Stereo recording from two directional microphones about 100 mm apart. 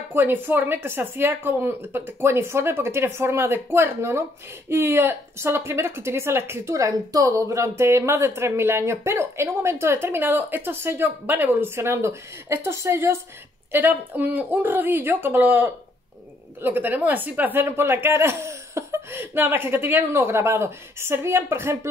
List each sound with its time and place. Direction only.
0.1 s speech: 20° right (ahead or behind)